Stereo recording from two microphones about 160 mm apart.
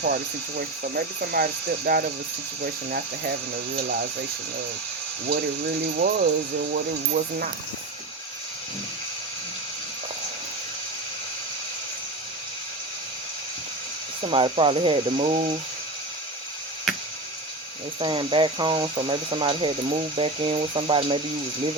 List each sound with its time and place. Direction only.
0.0 s speech: 75° right (ahead or behind)
6.0 s speech: 75° right (ahead or behind)
14.2 s speech: 35° right (ahead or behind)
18.0 s speech: 30° right (ahead or behind)